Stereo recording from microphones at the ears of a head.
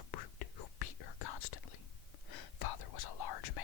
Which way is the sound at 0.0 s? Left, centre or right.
Left.